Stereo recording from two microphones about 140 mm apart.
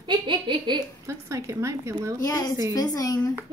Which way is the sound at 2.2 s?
25° left (ahead or behind).